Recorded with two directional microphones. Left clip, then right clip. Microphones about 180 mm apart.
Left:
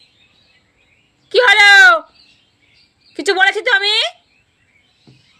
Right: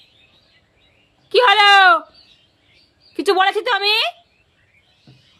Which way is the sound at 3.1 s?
5° right (ahead or behind).